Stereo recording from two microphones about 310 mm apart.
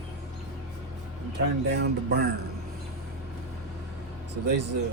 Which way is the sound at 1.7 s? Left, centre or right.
Right.